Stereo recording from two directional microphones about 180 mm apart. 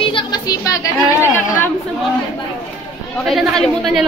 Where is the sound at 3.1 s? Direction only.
Centre (ahead or behind).